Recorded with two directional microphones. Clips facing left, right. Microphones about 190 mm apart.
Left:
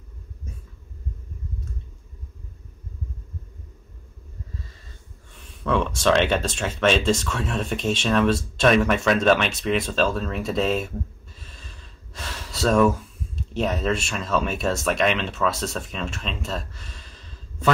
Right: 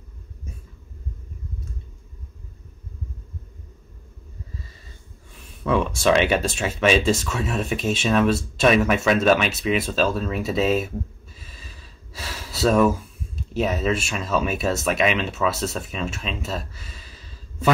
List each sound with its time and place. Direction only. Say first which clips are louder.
5.3 s speech: right 2 dB; 10° right (ahead or behind)
11.3 s gasp: right 1 dB; 5° right (ahead or behind)
13.5 s speech: right 1 dB; 5° right (ahead or behind)